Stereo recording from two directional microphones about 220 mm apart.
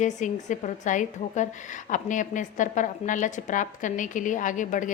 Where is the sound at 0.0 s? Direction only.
35° left (ahead or behind).